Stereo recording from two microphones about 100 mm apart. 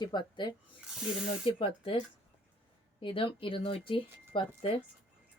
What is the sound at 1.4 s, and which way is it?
Speech, 60° left (ahead or behind).